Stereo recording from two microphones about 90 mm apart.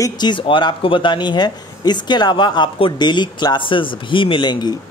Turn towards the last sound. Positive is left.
turn(degrees=60)  # may be behind; listen again after turning